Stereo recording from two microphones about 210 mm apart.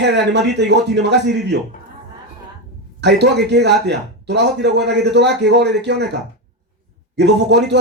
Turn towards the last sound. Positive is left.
turn(degrees=-55)  # may be behind; listen again after turning